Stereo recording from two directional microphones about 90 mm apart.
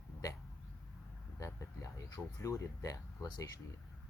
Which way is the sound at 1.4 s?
35° left (ahead or behind).